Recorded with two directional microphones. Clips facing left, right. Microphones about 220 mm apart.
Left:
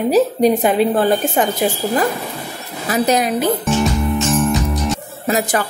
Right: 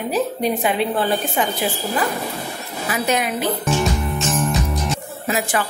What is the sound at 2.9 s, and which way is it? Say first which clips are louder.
Speech: left 5 dB; 40° left (ahead or behind).